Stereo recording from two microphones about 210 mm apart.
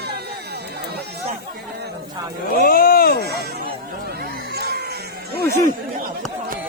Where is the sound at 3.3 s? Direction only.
50° right (ahead or behind).